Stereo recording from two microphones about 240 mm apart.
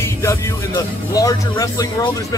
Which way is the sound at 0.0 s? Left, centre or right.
Centre.